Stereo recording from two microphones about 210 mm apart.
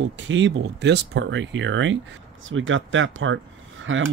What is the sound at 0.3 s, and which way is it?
Speech, 60° right (ahead or behind).